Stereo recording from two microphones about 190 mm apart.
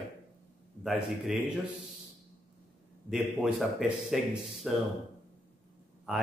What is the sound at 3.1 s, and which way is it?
A man's voice, centre (ahead or behind).